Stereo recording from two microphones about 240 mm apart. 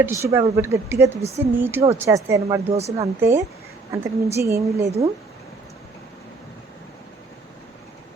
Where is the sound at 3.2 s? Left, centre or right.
Centre.